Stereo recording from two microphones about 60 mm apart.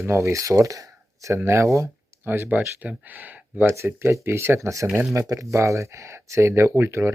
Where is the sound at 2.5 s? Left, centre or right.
Right.